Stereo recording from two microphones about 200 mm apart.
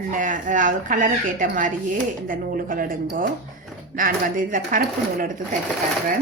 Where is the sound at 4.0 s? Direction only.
45° right (ahead or behind).